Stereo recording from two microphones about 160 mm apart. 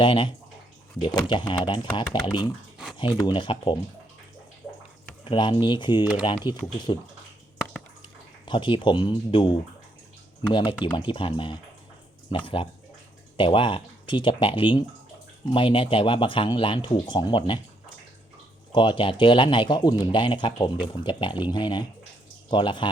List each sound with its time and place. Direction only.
0.0 s speech: 30° left (ahead or behind)
5.2 s speech: 30° left (ahead or behind)
8.4 s speech: 30° left (ahead or behind)
13.3 s speech: 30° left (ahead or behind)
18.7 s speech: 30° left (ahead or behind)